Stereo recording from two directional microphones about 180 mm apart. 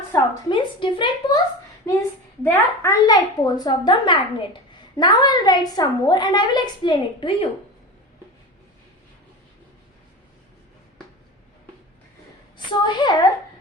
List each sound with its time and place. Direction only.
0.5 s a child's voice: 25° left (ahead or behind)
2.0 s a child's voice: 15° left (ahead or behind)
12.5 s a child's voice: 25° left (ahead or behind)